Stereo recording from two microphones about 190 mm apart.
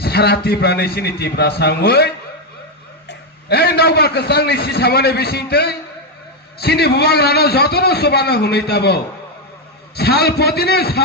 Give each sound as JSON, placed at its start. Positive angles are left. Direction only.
{"t": 0.0, "sound": "a man's voice", "side_deg": 55}